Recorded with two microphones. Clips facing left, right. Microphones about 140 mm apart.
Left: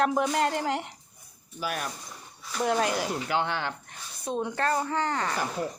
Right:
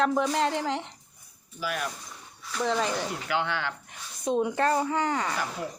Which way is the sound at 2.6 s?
10° left (ahead or behind).